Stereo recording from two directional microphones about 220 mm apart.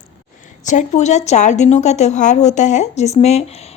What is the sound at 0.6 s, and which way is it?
A woman's voice, 35° left (ahead or behind).